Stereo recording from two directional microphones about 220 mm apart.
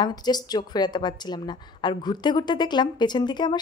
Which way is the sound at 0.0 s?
20° left (ahead or behind).